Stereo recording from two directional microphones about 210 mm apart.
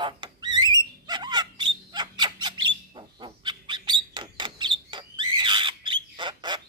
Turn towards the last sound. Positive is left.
turn(degrees=-20)  # may be behind; listen again after turning